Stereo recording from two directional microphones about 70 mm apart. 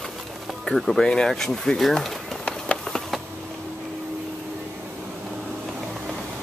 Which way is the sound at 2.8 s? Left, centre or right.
Centre.